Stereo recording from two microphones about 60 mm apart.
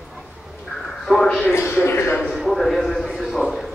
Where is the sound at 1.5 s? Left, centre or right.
Left.